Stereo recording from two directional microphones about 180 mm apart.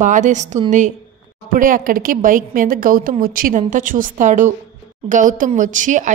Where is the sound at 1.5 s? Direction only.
50° right (ahead or behind).